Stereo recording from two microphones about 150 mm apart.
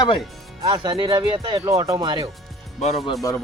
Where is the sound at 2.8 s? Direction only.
50° left (ahead or behind).